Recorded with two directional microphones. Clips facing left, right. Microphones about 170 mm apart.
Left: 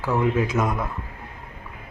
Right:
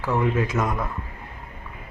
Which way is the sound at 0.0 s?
5° left (ahead or behind).